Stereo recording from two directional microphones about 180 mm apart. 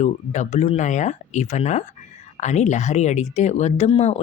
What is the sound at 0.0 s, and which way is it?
Speech, 40° left (ahead or behind).